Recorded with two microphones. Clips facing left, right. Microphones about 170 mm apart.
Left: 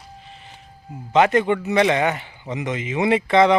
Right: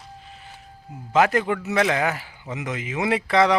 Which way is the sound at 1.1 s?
Centre (ahead or behind).